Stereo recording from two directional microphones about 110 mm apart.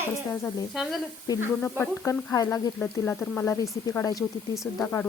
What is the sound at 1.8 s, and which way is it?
Speech, 30° left (ahead or behind).